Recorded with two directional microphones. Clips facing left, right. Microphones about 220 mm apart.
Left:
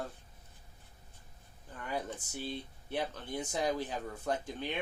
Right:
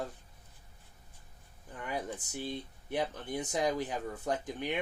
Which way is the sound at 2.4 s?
15° right (ahead or behind).